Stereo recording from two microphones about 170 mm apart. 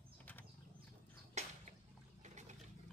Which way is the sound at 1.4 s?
40° right (ahead or behind).